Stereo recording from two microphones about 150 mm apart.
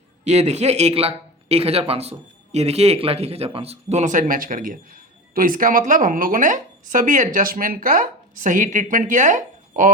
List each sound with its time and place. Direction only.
0.3 s speech: 50° right (ahead or behind); by 8.0 s 70° right (ahead or behind)
8.4 s speech: 60° right (ahead or behind)